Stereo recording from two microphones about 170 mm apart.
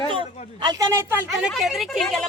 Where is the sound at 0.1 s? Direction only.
25° right (ahead or behind).